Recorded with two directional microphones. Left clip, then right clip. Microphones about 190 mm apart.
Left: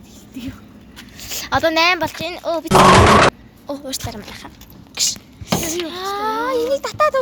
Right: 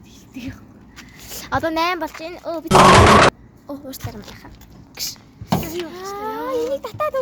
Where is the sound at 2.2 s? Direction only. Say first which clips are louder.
Left 6 dB; 5° left (ahead or behind).